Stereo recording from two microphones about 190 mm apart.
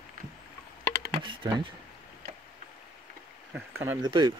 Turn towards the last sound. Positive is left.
turn(degrees=-25)  # may be behind; listen again after turning